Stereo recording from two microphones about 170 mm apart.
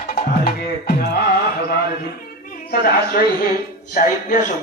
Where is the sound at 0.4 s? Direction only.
65° left (ahead or behind).